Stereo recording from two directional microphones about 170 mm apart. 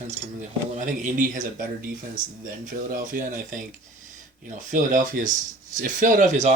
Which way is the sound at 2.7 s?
55° right (ahead or behind).